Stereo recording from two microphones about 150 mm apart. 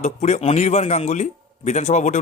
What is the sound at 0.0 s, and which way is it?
Speech, 50° left (ahead or behind).